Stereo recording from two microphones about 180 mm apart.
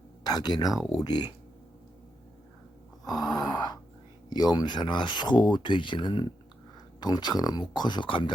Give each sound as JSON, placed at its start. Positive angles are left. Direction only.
{"t": 0.3, "sound": "speech", "side_deg": 25}
{"t": 3.1, "sound": "speech", "side_deg": 20}